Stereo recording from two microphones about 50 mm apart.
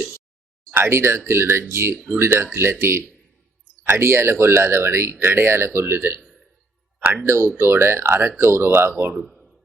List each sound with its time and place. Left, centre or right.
0.7 s speech: right
0.9 s speech: right
7.3 s speech: right
9.3 s a sound: centre